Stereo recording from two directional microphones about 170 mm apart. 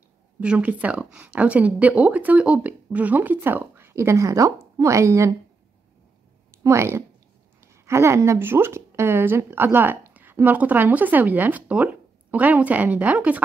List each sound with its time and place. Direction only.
0.4 s speech: 5° right (ahead or behind)
6.5 s a woman's voice: 15° right (ahead or behind)